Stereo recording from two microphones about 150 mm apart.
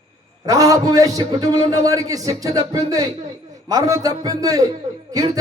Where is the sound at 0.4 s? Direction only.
25° right (ahead or behind).